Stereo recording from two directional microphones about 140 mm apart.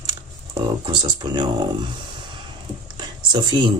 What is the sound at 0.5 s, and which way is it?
Speech, 35° right (ahead or behind).